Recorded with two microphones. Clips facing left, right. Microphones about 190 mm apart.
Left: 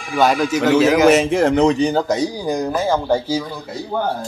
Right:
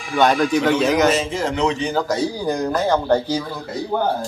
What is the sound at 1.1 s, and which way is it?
Speech, 65° left (ahead or behind).